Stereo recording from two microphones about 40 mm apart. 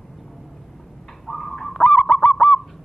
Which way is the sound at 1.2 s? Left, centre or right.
Centre.